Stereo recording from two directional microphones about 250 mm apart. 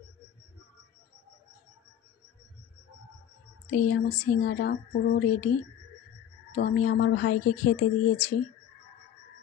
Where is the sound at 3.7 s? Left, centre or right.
Left.